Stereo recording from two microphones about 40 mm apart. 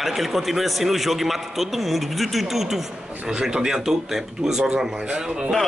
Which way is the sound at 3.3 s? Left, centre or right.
Centre.